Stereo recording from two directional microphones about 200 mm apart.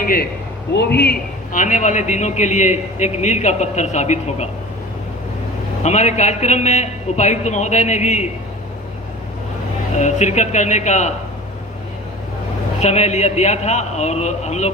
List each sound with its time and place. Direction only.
0.0 s a man's voice: 45° left (ahead or behind)
0.7 s a man's voice: 55° left (ahead or behind); by 4.4 s 35° left (ahead or behind)
5.8 s a man's voice: 35° left (ahead or behind)
10.0 s a man's voice: 35° left (ahead or behind)
12.8 s a man's voice: 35° left (ahead or behind)